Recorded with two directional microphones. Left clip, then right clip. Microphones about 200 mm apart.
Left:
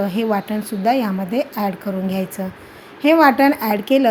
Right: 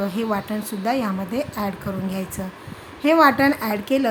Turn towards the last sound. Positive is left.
turn(degrees=20)  # may be behind; listen again after turning